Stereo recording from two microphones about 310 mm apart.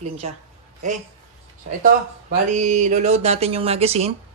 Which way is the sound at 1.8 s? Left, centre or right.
Right.